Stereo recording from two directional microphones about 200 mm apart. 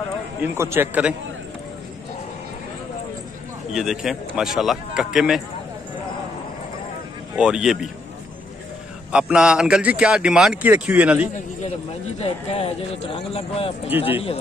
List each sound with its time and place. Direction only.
0.4 s a man's voice: 10° right (ahead or behind)
3.7 s speech: centre (ahead or behind)
7.3 s speech: 5° right (ahead or behind)
9.1 s speech: 5° right (ahead or behind)
12.2 s speech: 30° left (ahead or behind)